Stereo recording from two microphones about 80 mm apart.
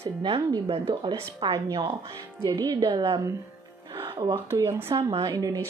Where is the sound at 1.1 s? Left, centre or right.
Right.